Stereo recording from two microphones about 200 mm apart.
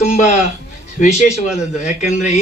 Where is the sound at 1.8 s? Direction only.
35° left (ahead or behind).